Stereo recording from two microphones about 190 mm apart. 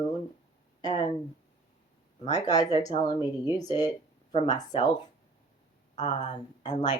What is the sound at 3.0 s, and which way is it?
Speech, 20° left (ahead or behind).